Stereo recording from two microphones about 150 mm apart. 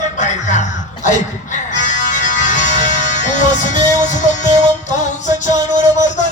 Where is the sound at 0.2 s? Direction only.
55° left (ahead or behind).